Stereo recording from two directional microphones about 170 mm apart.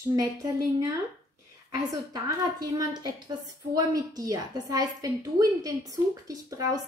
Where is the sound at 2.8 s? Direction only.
20° right (ahead or behind).